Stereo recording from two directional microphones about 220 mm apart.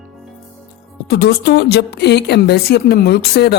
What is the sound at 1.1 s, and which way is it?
A woman's voice, 50° left (ahead or behind).